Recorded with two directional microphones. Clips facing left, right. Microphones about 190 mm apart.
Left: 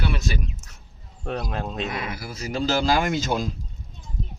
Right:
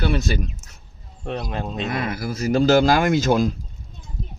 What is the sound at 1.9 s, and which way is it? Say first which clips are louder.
Speech: right 6 dB; 45° right (ahead or behind).